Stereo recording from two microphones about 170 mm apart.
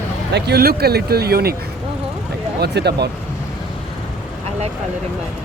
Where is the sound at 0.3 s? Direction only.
70° right (ahead or behind).